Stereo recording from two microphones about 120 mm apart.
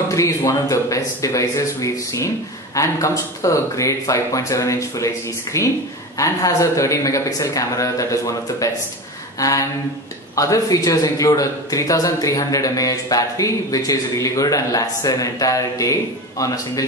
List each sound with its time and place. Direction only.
0.1 s a man's voice: 25° left (ahead or behind)